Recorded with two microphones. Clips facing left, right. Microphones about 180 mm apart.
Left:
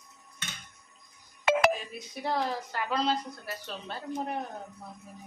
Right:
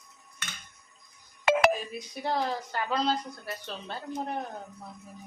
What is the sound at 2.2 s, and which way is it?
Speech, centre (ahead or behind).